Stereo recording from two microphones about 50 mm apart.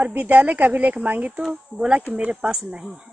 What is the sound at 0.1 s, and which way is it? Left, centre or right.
Speech, right.